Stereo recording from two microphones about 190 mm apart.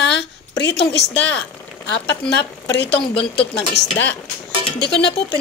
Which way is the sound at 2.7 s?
65° left (ahead or behind).